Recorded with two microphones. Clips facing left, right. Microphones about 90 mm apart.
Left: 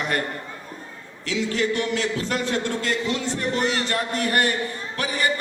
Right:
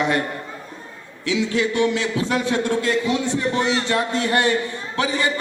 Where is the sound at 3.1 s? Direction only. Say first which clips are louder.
Right 4 dB; 20° right (ahead or behind).